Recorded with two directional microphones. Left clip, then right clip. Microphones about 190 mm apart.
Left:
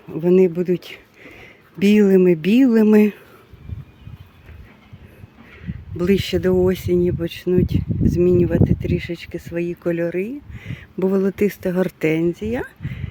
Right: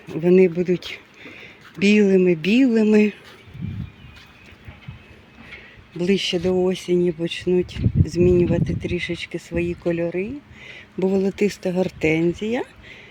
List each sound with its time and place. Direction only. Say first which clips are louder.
0.1 s speech: even; 10° left (ahead or behind)
6.0 s speech: left 2 dB; 20° left (ahead or behind); by 9.9 s centre (ahead or behind)
10.1 s speech: left 2 dB; 15° left (ahead or behind)